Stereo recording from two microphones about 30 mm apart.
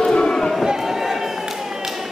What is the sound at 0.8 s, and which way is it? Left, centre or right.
Run, centre.